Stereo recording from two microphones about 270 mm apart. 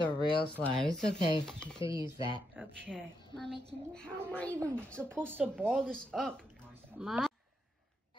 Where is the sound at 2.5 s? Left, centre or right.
Centre.